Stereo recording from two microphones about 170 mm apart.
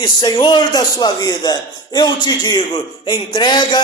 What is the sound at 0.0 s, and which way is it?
A man's voice, 25° left (ahead or behind).